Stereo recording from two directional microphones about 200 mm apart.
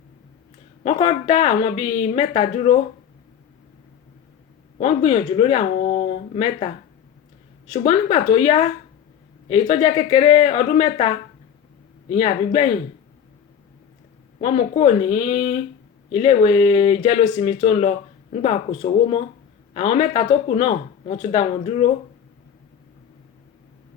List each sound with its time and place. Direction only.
0.9 s speech: 30° left (ahead or behind)
4.8 s speech: 30° left (ahead or behind)
14.4 s speech: 30° left (ahead or behind)